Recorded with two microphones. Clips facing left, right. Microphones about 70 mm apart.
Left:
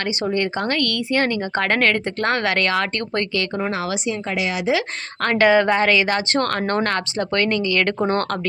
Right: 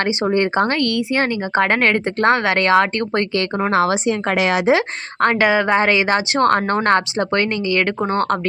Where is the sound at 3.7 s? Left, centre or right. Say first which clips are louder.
Right 7 dB; right.